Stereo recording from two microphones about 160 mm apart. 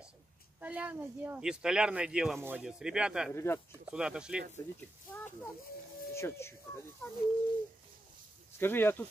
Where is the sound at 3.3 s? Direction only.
15° left (ahead or behind).